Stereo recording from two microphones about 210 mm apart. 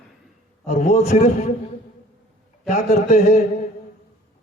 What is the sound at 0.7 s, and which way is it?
Speech, 30° left (ahead or behind).